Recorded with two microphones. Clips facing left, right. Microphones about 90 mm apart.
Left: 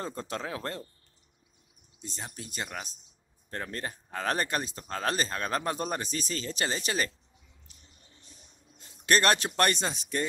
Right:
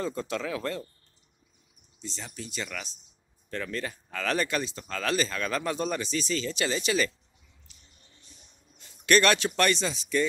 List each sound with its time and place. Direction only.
0.0 s speech: 40° left (ahead or behind)
2.0 s speech: 45° left (ahead or behind)
8.7 s a sound: 35° left (ahead or behind)
9.6 s speech: 45° left (ahead or behind)